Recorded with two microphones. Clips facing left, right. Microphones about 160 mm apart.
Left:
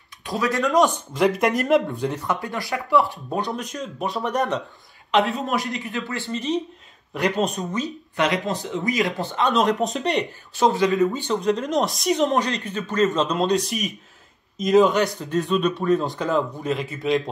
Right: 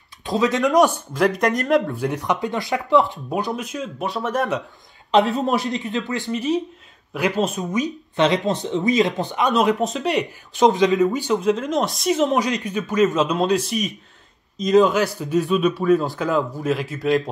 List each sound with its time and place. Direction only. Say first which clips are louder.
0.2 s speech: right 4 dB; 20° right (ahead or behind)
0.9 s speech: even; centre (ahead or behind)
2.0 s speech: right 3 dB; 15° right (ahead or behind)
3.3 s speech: right 2 dB; 5° right (ahead or behind)
5.1 s a man's voice: right 3 dB; 40° right (ahead or behind)
5.7 s a man's voice: right 4 dB; 20° right (ahead or behind); by 7.6 s 5° right (ahead or behind)
8.2 s speech: right 4 dB; 25° right (ahead or behind)
9.5 s speech: right 1 dB; centre (ahead or behind)
10.5 s speech: right 3 dB; 20° right (ahead or behind); by 12.4 s 5° right (ahead or behind)
12.4 s a man's voice: right 3 dB; 15° right (ahead or behind)